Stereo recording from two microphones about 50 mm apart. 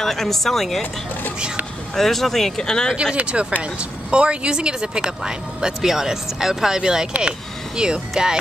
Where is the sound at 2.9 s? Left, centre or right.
Right.